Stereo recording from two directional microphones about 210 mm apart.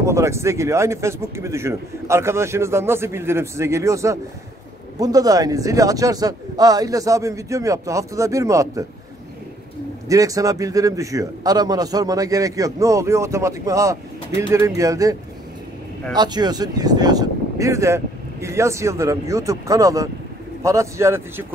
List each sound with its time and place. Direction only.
0.0 s a man's voice: 15° right (ahead or behind)
10.0 s a man's voice: 15° right (ahead or behind)
16.2 s a man's voice: 20° right (ahead or behind)